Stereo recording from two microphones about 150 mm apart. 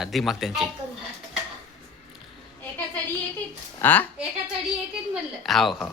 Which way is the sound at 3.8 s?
10° left (ahead or behind).